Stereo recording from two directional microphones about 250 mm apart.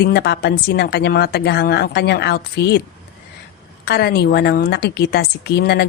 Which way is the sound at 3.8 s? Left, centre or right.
Left.